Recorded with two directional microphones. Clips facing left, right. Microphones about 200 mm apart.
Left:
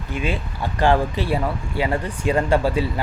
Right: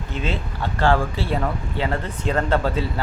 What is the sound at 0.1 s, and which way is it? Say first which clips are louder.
Speech: left 2 dB; 10° left (ahead or behind).